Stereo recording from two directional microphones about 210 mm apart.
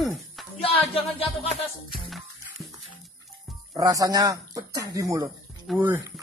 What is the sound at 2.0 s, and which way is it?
Music, centre (ahead or behind).